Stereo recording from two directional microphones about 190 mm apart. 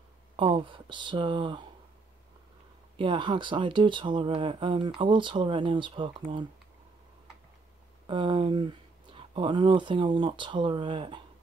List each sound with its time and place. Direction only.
0.4 s speech: 25° right (ahead or behind)
3.0 s speech: 25° right (ahead or behind)
8.1 s speech: 25° right (ahead or behind)